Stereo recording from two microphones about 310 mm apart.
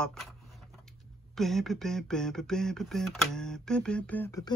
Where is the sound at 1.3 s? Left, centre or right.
Centre.